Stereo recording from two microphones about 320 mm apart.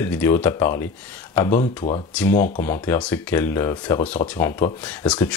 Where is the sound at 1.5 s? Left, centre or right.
Left.